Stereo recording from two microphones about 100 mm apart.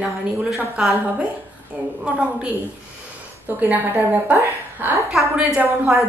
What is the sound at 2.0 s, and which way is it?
Speech, 10° right (ahead or behind).